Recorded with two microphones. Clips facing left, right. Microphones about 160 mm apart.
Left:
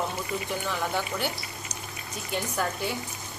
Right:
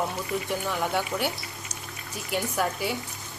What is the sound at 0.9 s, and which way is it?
Speech, centre (ahead or behind).